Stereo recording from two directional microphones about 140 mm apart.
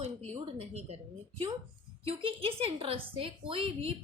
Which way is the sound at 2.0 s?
40° right (ahead or behind).